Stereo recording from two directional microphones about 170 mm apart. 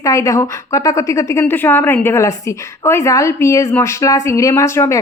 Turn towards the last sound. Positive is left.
turn(degrees=15)  # may be behind; listen again after turning